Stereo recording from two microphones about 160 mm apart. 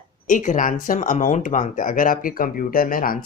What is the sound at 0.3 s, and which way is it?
Speech, 55° left (ahead or behind).